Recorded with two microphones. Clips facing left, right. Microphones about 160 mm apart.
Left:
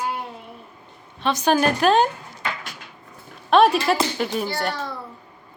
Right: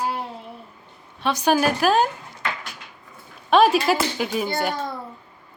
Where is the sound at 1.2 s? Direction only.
10° right (ahead or behind).